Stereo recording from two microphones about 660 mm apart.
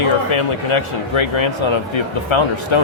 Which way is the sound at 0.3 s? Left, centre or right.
Left.